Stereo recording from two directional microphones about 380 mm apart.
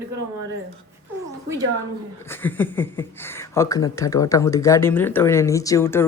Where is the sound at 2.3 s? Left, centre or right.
Centre.